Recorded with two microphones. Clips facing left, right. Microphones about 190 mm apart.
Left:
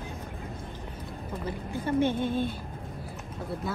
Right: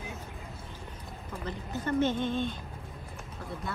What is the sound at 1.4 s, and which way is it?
A woman's voice, 10° left (ahead or behind).